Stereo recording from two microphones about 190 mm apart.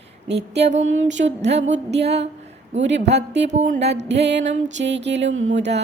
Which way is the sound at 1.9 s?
65° right (ahead or behind).